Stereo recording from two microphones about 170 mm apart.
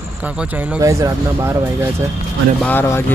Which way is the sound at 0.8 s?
20° right (ahead or behind).